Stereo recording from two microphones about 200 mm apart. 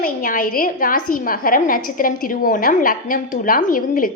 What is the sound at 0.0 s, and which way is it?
A woman's voice, 40° left (ahead or behind).